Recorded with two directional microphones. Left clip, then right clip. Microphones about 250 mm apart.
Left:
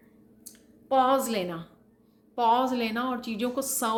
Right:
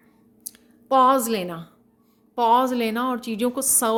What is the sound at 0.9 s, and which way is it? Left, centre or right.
A woman's voice, right.